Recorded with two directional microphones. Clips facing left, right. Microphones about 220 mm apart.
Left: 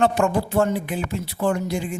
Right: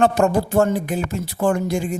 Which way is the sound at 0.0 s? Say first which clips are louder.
Right 3 dB; 40° right (ahead or behind).